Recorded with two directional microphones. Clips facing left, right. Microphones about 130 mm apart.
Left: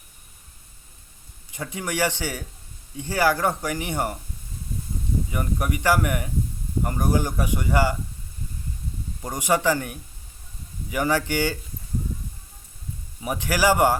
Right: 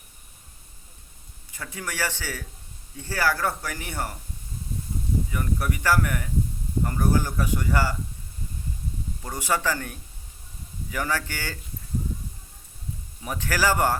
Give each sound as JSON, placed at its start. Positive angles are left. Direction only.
{"t": 1.5, "sound": "speech", "side_deg": 20}
{"t": 5.3, "sound": "a man's voice", "side_deg": 20}
{"t": 9.2, "sound": "a man's voice", "side_deg": 15}
{"t": 13.2, "sound": "a man's voice", "side_deg": 15}